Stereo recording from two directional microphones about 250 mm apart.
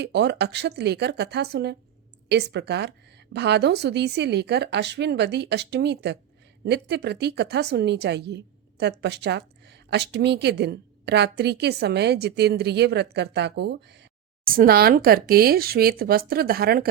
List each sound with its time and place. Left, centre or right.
0.0 s a woman's voice: right